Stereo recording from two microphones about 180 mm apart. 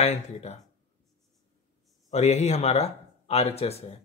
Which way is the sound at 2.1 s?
40° left (ahead or behind).